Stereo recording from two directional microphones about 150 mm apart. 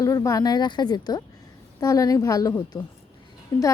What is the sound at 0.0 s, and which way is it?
A woman's voice, 20° left (ahead or behind).